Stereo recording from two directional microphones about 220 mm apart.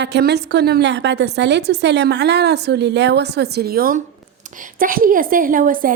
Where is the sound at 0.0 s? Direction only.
50° right (ahead or behind).